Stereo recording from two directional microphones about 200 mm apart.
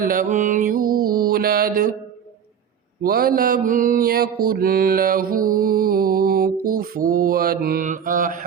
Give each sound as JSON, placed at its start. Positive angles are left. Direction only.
{"t": 0.0, "sound": "mantra", "side_deg": -45}
{"t": 3.0, "sound": "mantra", "side_deg": -50}